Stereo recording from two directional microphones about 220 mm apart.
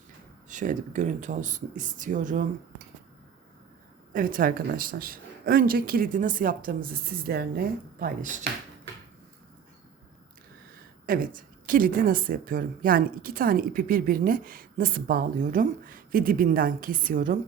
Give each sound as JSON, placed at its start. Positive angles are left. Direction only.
{"t": 0.4, "sound": "a woman's voice", "side_deg": -35}
{"t": 4.1, "sound": "a woman's voice", "side_deg": -40}
{"t": 11.0, "sound": "a woman's voice", "side_deg": -40}